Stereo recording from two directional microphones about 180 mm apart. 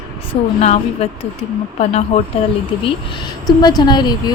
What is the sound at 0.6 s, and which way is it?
Speech, 35° left (ahead or behind).